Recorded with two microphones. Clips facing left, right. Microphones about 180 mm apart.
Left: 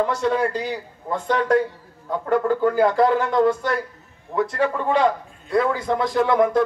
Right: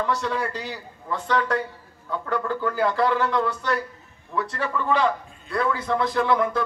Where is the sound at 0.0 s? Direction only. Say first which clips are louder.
Left 5 dB; 40° left (ahead or behind).